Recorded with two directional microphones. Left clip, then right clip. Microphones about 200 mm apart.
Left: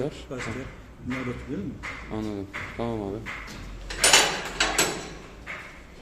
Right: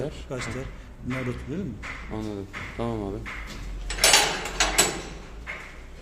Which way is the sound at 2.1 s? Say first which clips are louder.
Left 2 dB; 10° left (ahead or behind).